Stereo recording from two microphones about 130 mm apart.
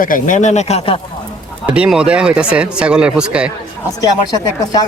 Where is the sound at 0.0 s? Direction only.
85° left; by 0.9 s 55° left (ahead or behind).